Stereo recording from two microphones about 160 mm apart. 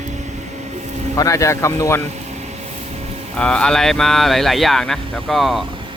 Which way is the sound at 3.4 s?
5° left (ahead or behind).